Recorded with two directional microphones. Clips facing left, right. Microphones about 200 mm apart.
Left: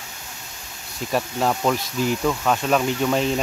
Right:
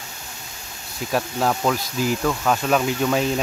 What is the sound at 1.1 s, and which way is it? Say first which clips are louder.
Speech: even; centre (ahead or behind).